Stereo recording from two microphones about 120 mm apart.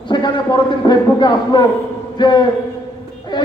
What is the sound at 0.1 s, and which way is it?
A man's voice, 40° left (ahead or behind).